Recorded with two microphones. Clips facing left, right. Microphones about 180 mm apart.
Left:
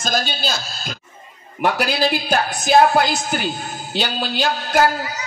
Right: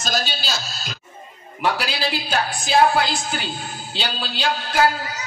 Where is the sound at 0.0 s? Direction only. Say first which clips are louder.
Left 3 dB; 50° left (ahead or behind).